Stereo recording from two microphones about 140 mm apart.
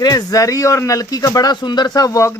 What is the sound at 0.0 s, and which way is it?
A man's voice, 25° left (ahead or behind).